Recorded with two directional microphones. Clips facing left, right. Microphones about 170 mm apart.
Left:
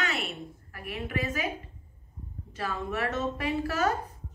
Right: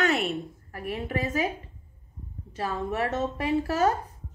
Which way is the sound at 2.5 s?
30° right (ahead or behind).